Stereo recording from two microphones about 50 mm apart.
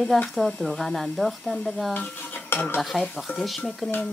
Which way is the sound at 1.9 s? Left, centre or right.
Left.